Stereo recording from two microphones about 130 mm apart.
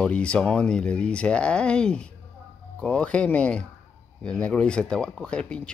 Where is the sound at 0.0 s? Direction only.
10° left (ahead or behind).